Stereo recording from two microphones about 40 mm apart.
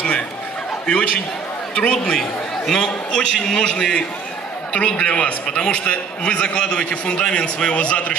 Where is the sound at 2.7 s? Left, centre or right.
Centre.